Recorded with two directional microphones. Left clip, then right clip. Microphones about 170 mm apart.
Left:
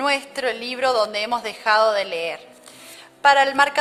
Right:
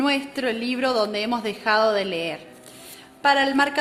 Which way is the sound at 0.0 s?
35° left (ahead or behind).